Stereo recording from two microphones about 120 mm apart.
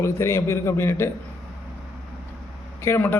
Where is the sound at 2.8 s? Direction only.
20° left (ahead or behind).